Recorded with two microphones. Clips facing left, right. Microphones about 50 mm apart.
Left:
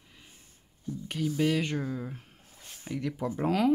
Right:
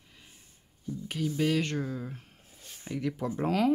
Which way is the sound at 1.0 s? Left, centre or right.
Centre.